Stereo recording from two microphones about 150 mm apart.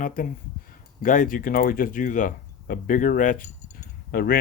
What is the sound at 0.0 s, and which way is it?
Speech, 65° left (ahead or behind).